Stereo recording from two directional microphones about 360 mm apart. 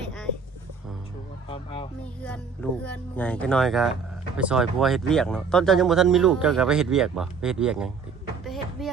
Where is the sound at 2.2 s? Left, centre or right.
Centre.